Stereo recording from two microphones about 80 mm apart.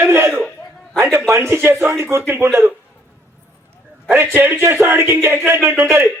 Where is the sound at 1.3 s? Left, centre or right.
Right.